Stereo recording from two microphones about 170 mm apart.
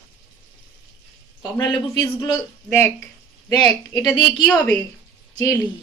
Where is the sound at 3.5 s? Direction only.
25° left (ahead or behind).